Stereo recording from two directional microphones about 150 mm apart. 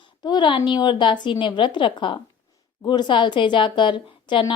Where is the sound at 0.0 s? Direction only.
30° left (ahead or behind).